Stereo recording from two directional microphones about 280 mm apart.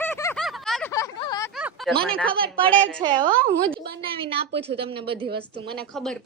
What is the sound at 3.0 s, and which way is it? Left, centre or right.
A woman's voice, centre.